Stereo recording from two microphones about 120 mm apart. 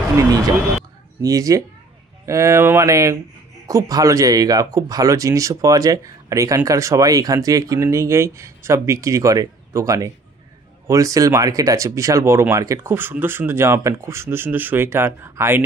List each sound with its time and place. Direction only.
1.2 s speech: 30° right (ahead or behind)